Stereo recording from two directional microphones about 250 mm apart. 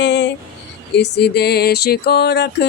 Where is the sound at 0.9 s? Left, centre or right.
Left.